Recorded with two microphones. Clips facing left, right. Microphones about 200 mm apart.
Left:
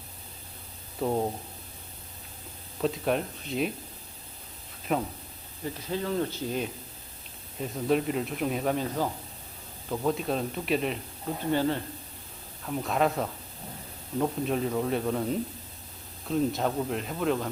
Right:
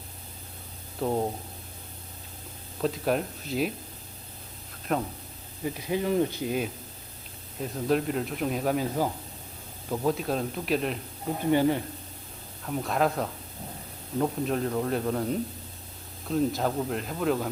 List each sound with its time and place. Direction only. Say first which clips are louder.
0.9 s speech: even; centre (ahead or behind)
2.8 s speech: right 1 dB; centre (ahead or behind)
4.9 s speech: even; 5° left (ahead or behind)
5.8 s speech: right 4 dB; 15° right (ahead or behind)
7.6 s speech: even; centre (ahead or behind)
11.5 s speech: right 4 dB; 15° right (ahead or behind)
12.6 s speech: even; centre (ahead or behind)